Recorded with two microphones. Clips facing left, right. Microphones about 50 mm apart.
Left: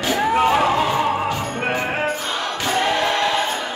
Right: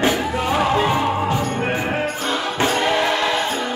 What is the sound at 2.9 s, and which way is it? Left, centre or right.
Music, centre.